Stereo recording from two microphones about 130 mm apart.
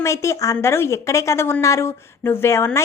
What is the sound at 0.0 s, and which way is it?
Speech, 20° left (ahead or behind).